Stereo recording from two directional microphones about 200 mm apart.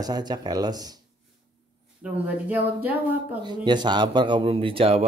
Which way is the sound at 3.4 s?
20° right (ahead or behind).